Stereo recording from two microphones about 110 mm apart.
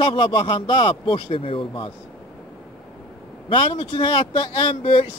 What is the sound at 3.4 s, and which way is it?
Speech, 50° left (ahead or behind).